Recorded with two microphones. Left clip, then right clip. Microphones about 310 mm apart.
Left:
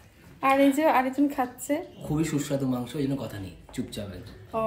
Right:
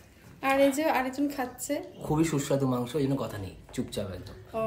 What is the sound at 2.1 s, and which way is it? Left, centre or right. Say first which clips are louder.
A man's voice: right 1 dB; centre.